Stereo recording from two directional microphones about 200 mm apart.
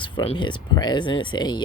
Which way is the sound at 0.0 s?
25° left (ahead or behind).